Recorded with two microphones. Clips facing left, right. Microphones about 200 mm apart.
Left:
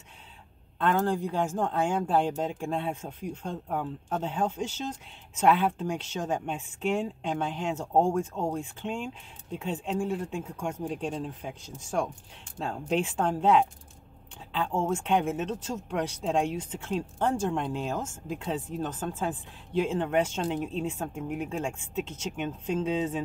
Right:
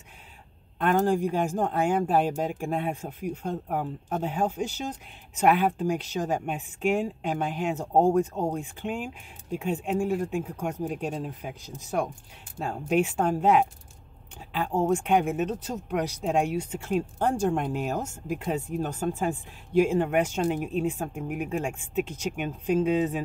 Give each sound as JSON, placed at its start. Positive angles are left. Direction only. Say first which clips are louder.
{"t": 0.7, "sound": "speech", "louder": "right 3 dB", "side_deg": -15}
{"t": 12.6, "sound": "speech", "louder": "right 4 dB", "side_deg": -10}
{"t": 14.9, "sound": "speech", "louder": "right 4 dB", "side_deg": -10}